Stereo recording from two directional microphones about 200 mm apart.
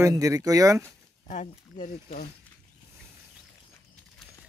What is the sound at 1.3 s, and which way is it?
Speech, 35° left (ahead or behind).